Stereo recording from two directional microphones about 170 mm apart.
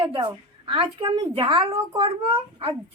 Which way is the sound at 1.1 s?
25° right (ahead or behind).